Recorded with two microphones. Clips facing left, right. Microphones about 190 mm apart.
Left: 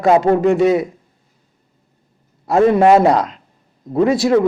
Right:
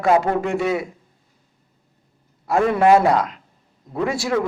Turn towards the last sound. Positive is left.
turn(degrees=20)  # may be behind; listen again after turning